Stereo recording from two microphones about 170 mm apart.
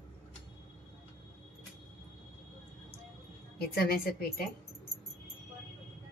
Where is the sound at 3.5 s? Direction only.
60° left (ahead or behind).